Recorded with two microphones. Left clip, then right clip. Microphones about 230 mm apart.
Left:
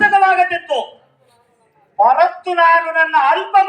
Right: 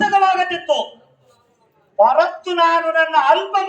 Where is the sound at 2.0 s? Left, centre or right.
Right.